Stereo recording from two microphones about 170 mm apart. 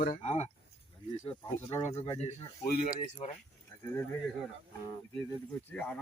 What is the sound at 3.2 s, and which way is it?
Speech, 40° left (ahead or behind).